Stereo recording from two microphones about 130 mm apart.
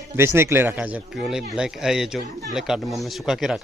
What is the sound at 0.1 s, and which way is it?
A man's voice, 20° right (ahead or behind).